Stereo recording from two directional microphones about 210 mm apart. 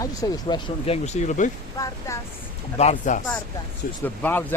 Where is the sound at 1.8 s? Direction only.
15° left (ahead or behind).